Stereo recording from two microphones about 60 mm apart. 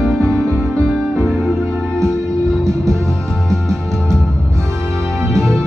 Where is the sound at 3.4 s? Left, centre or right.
Centre.